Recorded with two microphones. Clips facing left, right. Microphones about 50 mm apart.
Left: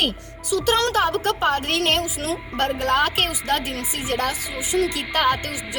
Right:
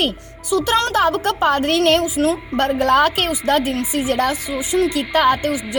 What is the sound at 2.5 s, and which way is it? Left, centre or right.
Speech, right.